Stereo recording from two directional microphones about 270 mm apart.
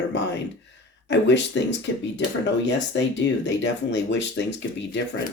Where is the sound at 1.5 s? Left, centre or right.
Left.